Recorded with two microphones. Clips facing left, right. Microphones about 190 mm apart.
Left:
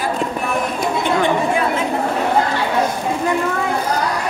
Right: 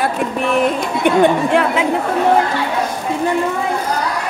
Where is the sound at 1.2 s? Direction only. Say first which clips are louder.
Right 6 dB; 70° right (ahead or behind).